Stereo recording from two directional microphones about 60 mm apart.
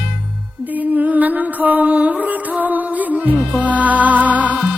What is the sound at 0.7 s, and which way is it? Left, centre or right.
Music, right.